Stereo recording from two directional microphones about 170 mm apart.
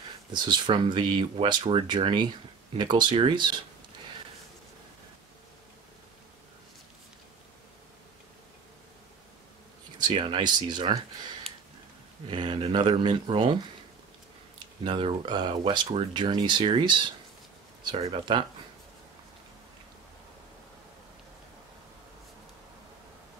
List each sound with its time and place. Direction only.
0.3 s speech: 25° right (ahead or behind)
9.9 s speech: 30° right (ahead or behind)
12.3 s speech: 30° right (ahead or behind)
14.9 s speech: 30° right (ahead or behind)